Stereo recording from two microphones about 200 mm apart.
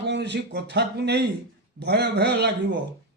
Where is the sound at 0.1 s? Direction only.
60° right (ahead or behind).